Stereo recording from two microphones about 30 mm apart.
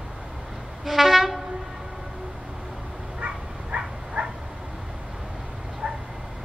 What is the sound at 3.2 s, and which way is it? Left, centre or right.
Bow-wow, right.